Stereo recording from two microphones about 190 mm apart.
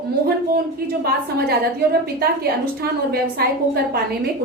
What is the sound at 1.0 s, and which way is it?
Speech, 55° right (ahead or behind).